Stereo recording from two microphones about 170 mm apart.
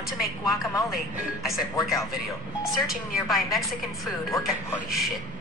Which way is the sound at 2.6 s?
Centre (ahead or behind).